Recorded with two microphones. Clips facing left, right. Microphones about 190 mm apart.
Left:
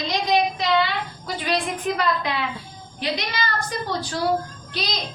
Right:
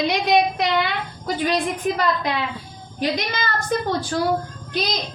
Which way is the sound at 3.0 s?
45° right (ahead or behind).